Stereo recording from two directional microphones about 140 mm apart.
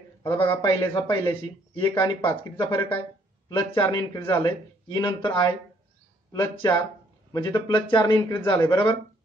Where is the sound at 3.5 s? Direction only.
35° left (ahead or behind).